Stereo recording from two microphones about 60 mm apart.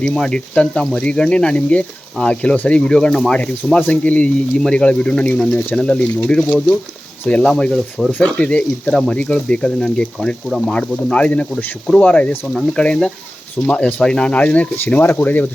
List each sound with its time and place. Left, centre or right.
0.0 s speech: centre
7.5 s speech: centre
8.2 s speech: centre
8.9 s speech: centre; by 15.4 s left